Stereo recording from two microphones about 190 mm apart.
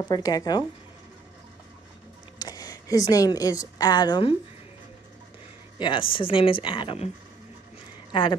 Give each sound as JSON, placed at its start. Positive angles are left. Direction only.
{"t": 0.1, "sound": "speech", "side_deg": 20}
{"t": 2.3, "sound": "a woman's voice", "side_deg": 20}
{"t": 5.8, "sound": "speech", "side_deg": 25}
{"t": 8.1, "sound": "speech", "side_deg": 25}